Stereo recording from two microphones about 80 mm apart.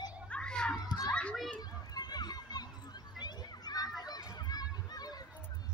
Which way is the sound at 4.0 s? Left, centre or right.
Left.